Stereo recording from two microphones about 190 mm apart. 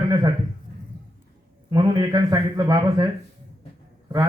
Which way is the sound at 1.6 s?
20° right (ahead or behind).